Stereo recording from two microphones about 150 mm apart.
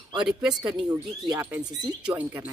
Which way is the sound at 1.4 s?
10° right (ahead or behind).